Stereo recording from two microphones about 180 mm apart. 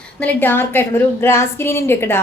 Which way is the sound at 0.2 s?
10° left (ahead or behind).